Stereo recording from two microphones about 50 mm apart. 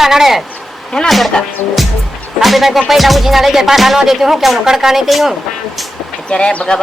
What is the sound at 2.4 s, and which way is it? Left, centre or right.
Speech, centre.